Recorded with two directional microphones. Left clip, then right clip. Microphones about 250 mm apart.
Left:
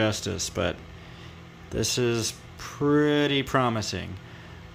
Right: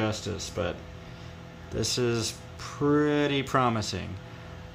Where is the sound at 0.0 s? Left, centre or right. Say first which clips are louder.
Left 4 dB; left.